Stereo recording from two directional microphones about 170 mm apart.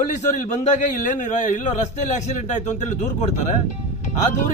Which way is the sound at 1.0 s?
45° left (ahead or behind).